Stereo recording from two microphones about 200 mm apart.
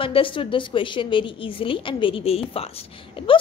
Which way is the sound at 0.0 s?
25° left (ahead or behind).